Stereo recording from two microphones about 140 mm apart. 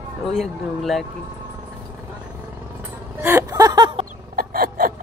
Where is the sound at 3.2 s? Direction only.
20° right (ahead or behind).